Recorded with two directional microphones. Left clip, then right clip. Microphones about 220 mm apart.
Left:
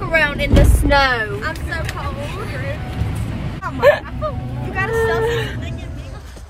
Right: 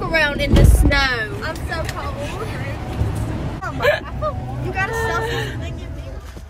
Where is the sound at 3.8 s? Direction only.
15° left (ahead or behind).